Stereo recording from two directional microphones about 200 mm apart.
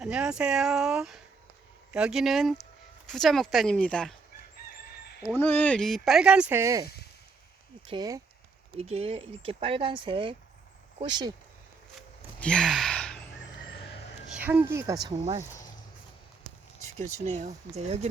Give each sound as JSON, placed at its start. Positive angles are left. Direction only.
{"t": 0.0, "sound": "speech", "side_deg": -5}
{"t": 5.3, "sound": "speech", "side_deg": 10}
{"t": 7.9, "sound": "speech", "side_deg": -20}
{"t": 8.7, "sound": "speech", "side_deg": -30}
{"t": 11.9, "sound": "sigh", "side_deg": 5}
{"t": 14.3, "sound": "speech", "side_deg": -10}
{"t": 17.0, "sound": "speech", "side_deg": -35}